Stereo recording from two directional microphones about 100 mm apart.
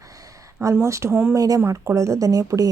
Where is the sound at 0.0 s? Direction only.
35° right (ahead or behind).